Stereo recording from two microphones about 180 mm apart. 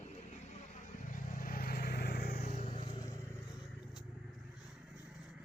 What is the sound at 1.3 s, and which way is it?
Vehicle, 50° left (ahead or behind).